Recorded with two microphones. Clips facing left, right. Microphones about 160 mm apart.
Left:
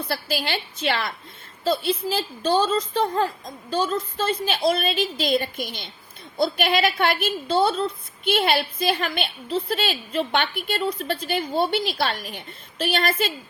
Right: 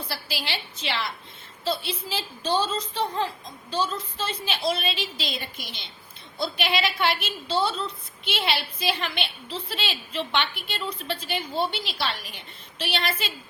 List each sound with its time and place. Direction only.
0.1 s a woman's voice: 50° left (ahead or behind)